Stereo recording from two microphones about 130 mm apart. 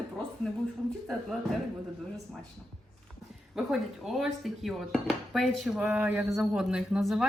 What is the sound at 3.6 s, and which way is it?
Dishes, 5° right (ahead or behind).